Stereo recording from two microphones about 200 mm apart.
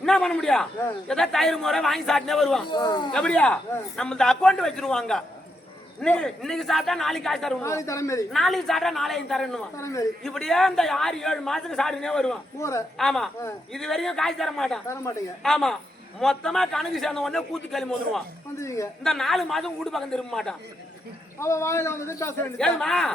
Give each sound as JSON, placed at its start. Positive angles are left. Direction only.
{"t": 0.0, "sound": "a man's voice", "side_deg": 0}
{"t": 2.6, "sound": "speech", "side_deg": 20}
{"t": 3.1, "sound": "a man's voice", "side_deg": 5}
{"t": 7.6, "sound": "a man's voice", "side_deg": 15}
{"t": 8.3, "sound": "a man's voice", "side_deg": 0}
{"t": 9.7, "sound": "a man's voice", "side_deg": 15}
{"t": 10.2, "sound": "a man's voice", "side_deg": 0}
{"t": 12.5, "sound": "a man's voice", "side_deg": 15}
{"t": 13.0, "sound": "a man's voice", "side_deg": 0}
{"t": 18.6, "sound": "a man's voice", "side_deg": 15}
{"t": 19.0, "sound": "a man's voice", "side_deg": 0}
{"t": 21.3, "sound": "a man's voice", "side_deg": 15}